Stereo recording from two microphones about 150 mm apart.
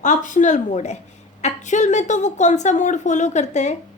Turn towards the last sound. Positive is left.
turn(degrees=50)  # may be behind; listen again after turning